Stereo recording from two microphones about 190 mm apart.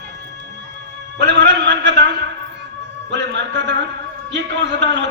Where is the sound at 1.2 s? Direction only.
70° right (ahead or behind).